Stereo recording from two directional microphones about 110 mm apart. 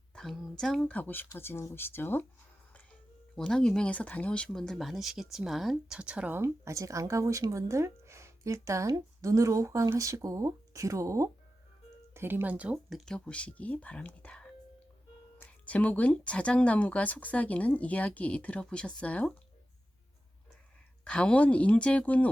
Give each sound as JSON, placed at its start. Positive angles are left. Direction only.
{"t": 0.1, "sound": "speech", "side_deg": 5}
{"t": 3.3, "sound": "speech", "side_deg": 5}
{"t": 6.4, "sound": "speech", "side_deg": -30}
{"t": 12.9, "sound": "speech", "side_deg": 5}
{"t": 21.0, "sound": "speech", "side_deg": 10}